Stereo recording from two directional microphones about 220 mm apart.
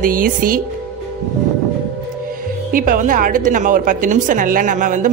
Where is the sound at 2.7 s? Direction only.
40° right (ahead or behind).